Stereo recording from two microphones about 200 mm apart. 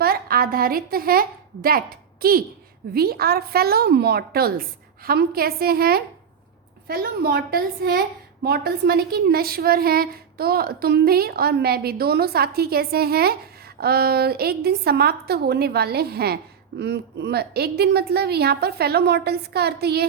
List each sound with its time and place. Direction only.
0.0 s a woman's voice: 50° right (ahead or behind)